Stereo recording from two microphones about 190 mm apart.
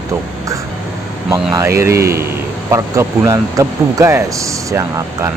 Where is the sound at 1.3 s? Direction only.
15° right (ahead or behind).